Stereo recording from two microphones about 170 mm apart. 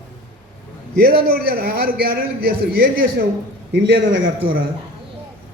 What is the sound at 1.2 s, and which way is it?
A man's voice, 65° right (ahead or behind).